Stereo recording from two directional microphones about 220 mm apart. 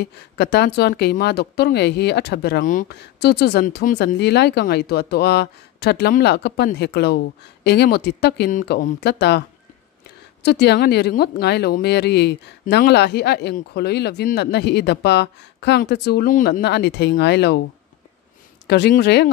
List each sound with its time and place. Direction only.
0.0 s speech: 50° left (ahead or behind)
10.4 s speech: 50° left (ahead or behind)
18.7 s speech: 50° left (ahead or behind)